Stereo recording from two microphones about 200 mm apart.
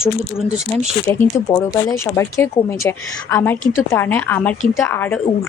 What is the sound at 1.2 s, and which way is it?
Speech, 15° left (ahead or behind).